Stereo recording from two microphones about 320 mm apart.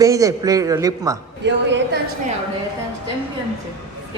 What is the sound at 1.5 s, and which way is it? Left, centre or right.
Speech, right.